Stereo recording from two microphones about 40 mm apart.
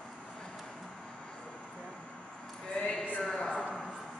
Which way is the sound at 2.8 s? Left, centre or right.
Left.